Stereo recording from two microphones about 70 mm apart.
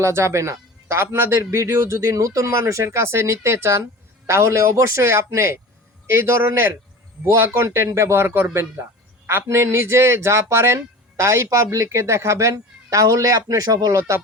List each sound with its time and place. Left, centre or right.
0.0 s a man's voice: right